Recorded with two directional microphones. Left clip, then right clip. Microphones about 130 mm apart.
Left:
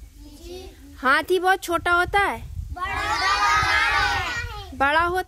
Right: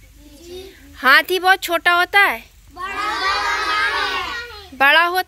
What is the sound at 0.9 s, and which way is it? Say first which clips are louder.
Speech: right 6 dB; 10° left (ahead or behind).